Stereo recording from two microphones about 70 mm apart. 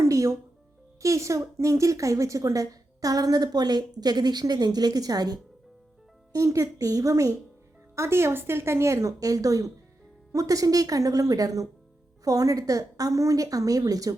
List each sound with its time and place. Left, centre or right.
0.0 s music: right
1.0 s a woman's voice: right
6.3 s a woman's voice: right
7.9 s a woman's voice: right